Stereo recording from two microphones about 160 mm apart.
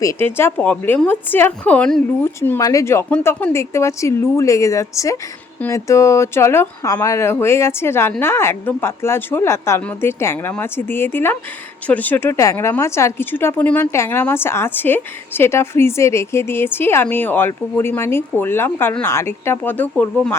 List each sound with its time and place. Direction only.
0.0 s speech: 15° left (ahead or behind)